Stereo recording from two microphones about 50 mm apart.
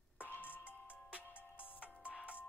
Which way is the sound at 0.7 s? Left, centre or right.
Right.